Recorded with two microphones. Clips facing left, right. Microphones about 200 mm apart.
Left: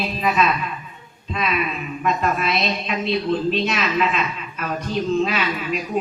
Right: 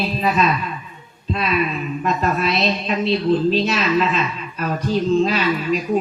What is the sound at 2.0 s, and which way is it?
A woman's voice, 35° right (ahead or behind).